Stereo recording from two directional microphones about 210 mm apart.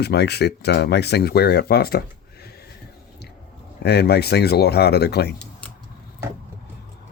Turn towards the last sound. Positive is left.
turn(degrees=50)  # may be behind; listen again after turning